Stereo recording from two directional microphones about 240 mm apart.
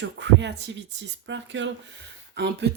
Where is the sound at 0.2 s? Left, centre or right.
Right.